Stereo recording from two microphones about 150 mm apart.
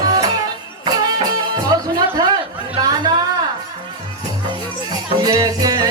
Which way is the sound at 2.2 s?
25° right (ahead or behind).